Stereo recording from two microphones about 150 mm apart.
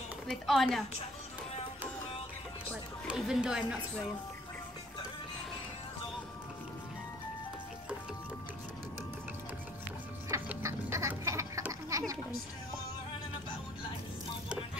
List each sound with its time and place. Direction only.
0.3 s speech: centre (ahead or behind)
3.2 s speech: 5° right (ahead or behind)
10.3 s a sound: 20° right (ahead or behind)